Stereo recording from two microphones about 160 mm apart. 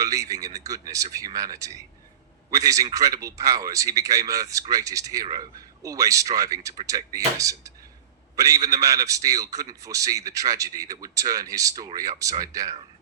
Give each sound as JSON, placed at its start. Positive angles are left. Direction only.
{"t": 0.0, "sound": "a man's voice", "side_deg": -20}